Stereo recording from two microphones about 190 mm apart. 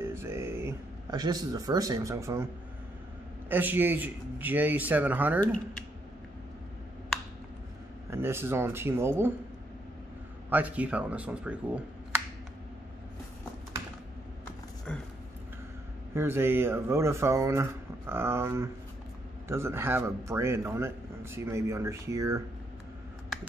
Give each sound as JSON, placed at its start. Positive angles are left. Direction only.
{"t": 0.0, "sound": "a sound", "side_deg": -15}
{"t": 3.4, "sound": "a man's voice", "side_deg": -10}
{"t": 8.1, "sound": "a man's voice", "side_deg": -10}
{"t": 10.5, "sound": "a man's voice", "side_deg": -10}
{"t": 14.9, "sound": "a sound", "side_deg": 5}
{"t": 16.2, "sound": "a man's voice", "side_deg": -10}